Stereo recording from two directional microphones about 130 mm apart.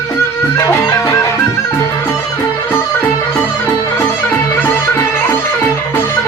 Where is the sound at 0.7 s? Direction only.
25° left (ahead or behind).